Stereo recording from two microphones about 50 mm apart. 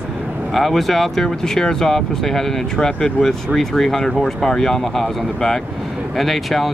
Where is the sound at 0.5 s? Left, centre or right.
Centre.